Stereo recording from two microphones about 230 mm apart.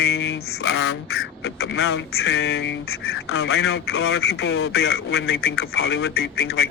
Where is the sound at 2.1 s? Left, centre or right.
Left.